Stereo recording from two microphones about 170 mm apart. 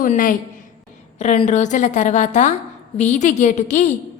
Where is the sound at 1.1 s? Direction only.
40° left (ahead or behind).